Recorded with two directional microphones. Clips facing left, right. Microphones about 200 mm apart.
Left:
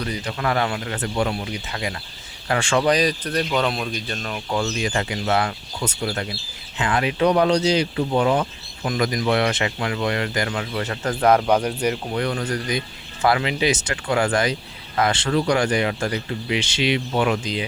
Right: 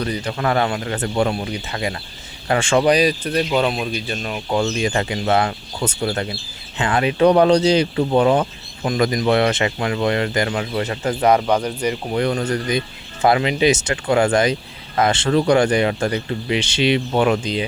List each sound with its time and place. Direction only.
0.3 s speech: 35° right (ahead or behind)
2.9 s speech: 10° right (ahead or behind)
4.8 s speech: 25° right (ahead or behind)
11.0 s speech: 10° right (ahead or behind)
11.4 s speech: 10° left (ahead or behind)
12.1 s speech: 25° right (ahead or behind)